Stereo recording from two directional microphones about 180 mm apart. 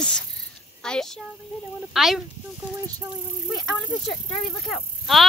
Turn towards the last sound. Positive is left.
turn(degrees=0)  # may be behind; listen again after turning